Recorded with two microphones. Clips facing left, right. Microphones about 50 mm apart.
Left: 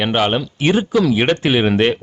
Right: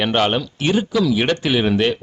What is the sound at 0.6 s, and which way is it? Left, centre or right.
Speech, left.